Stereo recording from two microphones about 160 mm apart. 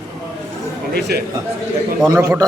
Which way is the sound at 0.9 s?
90° right.